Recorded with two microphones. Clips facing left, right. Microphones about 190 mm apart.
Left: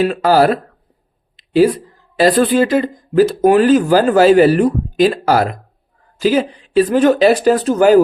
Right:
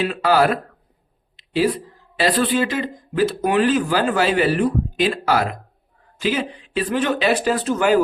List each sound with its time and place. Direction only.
0.0 s speech: 40° left (ahead or behind)
1.4 s a sound: 45° left (ahead or behind)
2.1 s speech: 45° left (ahead or behind)